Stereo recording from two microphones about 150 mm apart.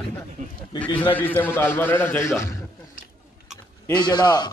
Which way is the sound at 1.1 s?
10° left (ahead or behind).